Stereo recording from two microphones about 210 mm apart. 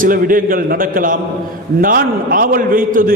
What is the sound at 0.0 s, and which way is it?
A man's voice, 40° right (ahead or behind).